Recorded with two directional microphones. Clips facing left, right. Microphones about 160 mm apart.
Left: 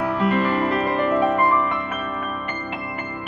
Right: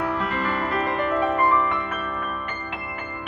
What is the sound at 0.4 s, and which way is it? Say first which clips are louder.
Music: left 5 dB; 15° left (ahead or behind).